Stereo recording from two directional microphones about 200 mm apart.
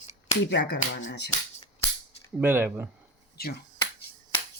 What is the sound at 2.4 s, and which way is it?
Speech, 10° right (ahead or behind).